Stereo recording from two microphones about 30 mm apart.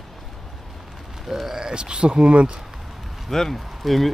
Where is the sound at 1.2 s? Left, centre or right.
Centre.